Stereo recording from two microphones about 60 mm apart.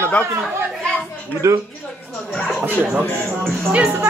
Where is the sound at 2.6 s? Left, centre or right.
Right.